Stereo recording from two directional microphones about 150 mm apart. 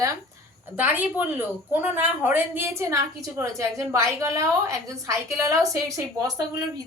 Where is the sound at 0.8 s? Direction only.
10° right (ahead or behind).